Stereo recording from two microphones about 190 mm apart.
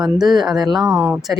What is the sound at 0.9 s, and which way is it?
Speech, 15° right (ahead or behind).